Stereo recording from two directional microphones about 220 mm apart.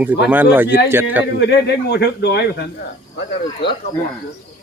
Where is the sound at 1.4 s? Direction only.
50° left (ahead or behind).